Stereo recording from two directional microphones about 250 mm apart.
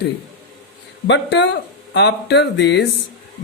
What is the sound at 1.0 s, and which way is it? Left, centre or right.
Speech, left.